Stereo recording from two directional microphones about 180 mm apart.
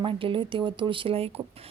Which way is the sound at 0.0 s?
30° right (ahead or behind).